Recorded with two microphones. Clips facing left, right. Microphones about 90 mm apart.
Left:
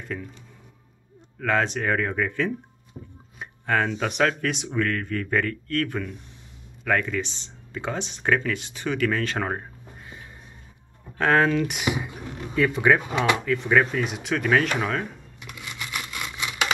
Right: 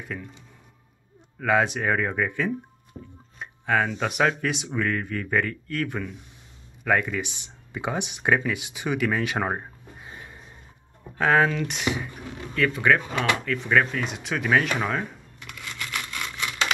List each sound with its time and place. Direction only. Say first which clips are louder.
0.0 s speech: left 2 dB; 5° right (ahead or behind)
1.4 s speech: right 1 dB; 5° right (ahead or behind)
11.1 s speech: left 1 dB; centre (ahead or behind)
15.4 s a sound: even; 15° left (ahead or behind)